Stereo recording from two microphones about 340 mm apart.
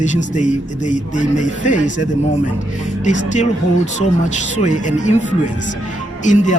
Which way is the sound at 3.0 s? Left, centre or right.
Left.